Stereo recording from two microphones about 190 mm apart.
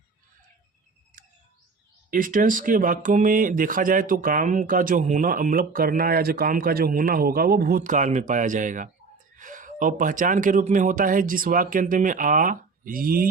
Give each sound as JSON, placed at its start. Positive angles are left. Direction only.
{"t": 2.0, "sound": "speech", "side_deg": -45}